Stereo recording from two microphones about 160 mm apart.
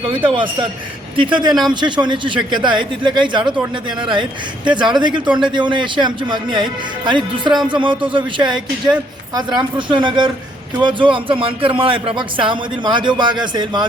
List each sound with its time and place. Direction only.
1.1 s speech: 30° right (ahead or behind)
4.6 s speech: 30° right (ahead or behind)